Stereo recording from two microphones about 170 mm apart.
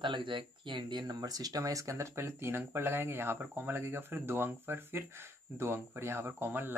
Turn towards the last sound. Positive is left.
turn(degrees=-10)  # may be behind; listen again after turning